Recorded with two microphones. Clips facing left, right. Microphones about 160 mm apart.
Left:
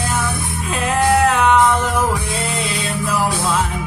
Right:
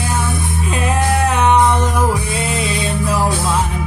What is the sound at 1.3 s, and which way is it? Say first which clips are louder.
Music: right 1 dB; 20° right (ahead or behind).